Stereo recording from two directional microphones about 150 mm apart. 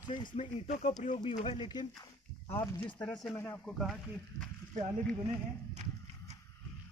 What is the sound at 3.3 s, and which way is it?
Speech, 15° left (ahead or behind).